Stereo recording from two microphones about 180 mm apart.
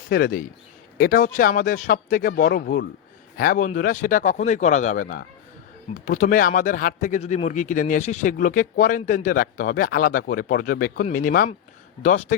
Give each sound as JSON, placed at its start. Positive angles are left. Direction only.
{"t": 0.1, "sound": "speech", "side_deg": 60}